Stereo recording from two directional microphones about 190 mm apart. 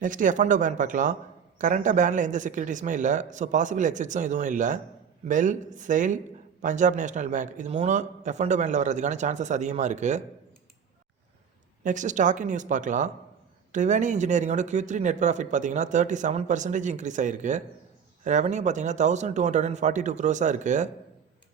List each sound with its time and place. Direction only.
0.0 s speech: 45° right (ahead or behind)
11.8 s speech: 40° right (ahead or behind)